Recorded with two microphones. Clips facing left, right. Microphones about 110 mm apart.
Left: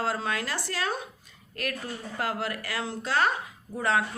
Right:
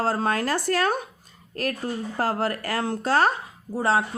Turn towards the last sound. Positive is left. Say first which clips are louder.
# right 4 dB
turn(degrees=-30)  # may be behind; listen again after turning